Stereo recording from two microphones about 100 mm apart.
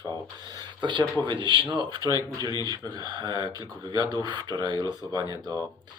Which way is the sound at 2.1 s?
40° right (ahead or behind).